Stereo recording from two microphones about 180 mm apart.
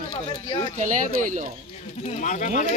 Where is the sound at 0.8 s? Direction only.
45° right (ahead or behind).